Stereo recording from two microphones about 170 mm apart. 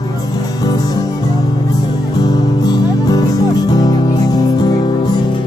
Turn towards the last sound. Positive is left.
turn(degrees=25)  # may be behind; listen again after turning